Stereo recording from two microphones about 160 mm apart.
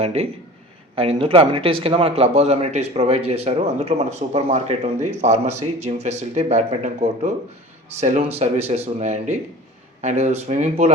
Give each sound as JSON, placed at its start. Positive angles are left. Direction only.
{"t": 0.0, "sound": "a man's voice", "side_deg": -40}